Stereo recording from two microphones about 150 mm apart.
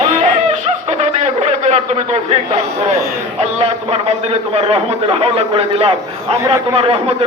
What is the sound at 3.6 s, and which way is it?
A man's voice, 40° right (ahead or behind).